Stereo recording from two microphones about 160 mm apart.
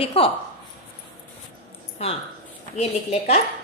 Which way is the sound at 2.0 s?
45° left (ahead or behind).